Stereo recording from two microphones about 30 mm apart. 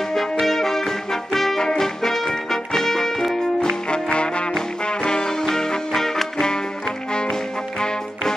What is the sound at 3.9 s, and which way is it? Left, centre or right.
Music, left.